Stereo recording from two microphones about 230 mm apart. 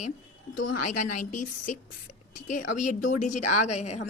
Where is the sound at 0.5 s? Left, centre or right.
Left.